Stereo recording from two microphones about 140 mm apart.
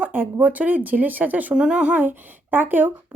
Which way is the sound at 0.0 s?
15° right (ahead or behind).